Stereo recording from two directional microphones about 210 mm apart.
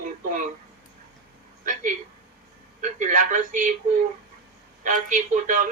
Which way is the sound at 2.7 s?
35° right (ahead or behind).